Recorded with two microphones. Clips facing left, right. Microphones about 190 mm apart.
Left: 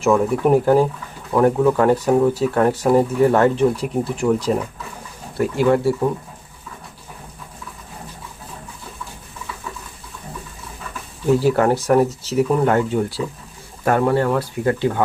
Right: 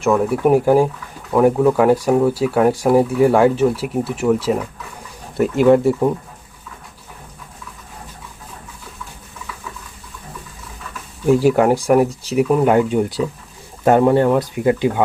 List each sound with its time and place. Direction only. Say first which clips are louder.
0.0 s speech: right 1 dB; 5° right (ahead or behind)
5.4 s speech: right 4 dB; 20° right (ahead or behind)
11.3 s speech: right 3 dB; 15° right (ahead or behind)